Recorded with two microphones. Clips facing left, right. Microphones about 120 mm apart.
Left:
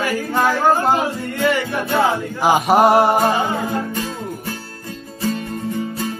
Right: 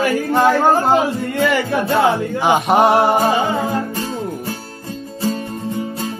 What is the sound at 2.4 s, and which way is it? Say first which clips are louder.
Music: even; centre (ahead or behind).